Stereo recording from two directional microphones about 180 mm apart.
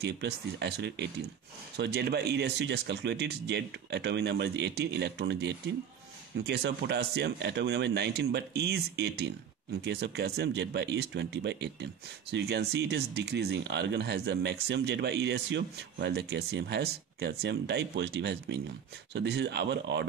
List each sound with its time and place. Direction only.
0.0 s speech: 70° right (ahead or behind)